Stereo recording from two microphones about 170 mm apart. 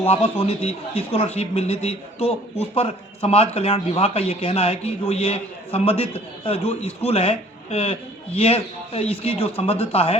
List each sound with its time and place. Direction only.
0.0 s a man's voice: 35° left (ahead or behind)